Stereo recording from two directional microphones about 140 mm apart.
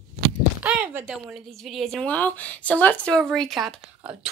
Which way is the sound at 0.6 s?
10° right (ahead or behind).